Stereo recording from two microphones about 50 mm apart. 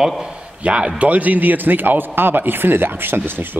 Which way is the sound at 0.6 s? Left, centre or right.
Right.